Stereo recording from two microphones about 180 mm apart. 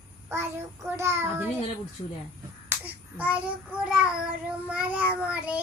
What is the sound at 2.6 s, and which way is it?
Child singing, 10° right (ahead or behind).